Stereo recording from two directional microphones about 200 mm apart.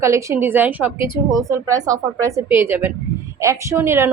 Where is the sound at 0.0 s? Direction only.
15° right (ahead or behind).